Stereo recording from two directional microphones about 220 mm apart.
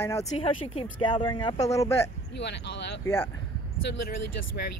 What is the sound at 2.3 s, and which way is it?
Speech, 50° left (ahead or behind).